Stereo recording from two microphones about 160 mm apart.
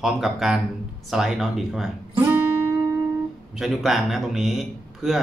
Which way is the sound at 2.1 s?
10° right (ahead or behind).